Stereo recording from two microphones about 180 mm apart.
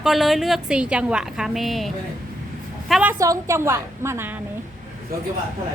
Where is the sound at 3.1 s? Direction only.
20° right (ahead or behind).